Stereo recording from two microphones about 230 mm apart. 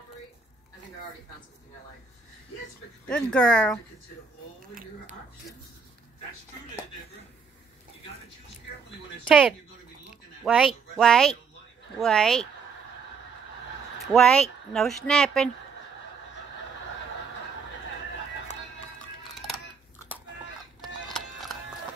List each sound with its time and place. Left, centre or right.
3.1 s speech: centre
9.3 s speech: centre
10.0 s a sound: centre
11.0 s speech: centre
14.0 s speech: centre
20.8 s music: centre